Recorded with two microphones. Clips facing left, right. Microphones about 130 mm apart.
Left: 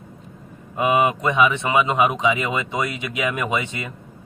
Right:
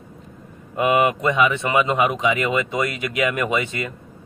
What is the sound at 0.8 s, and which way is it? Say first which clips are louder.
Speech: right 1 dB; 20° left (ahead or behind).